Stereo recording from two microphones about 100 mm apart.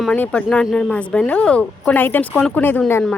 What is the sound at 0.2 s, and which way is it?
Speech, 10° left (ahead or behind).